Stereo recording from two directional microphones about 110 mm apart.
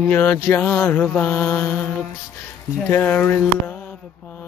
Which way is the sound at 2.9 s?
15° left (ahead or behind).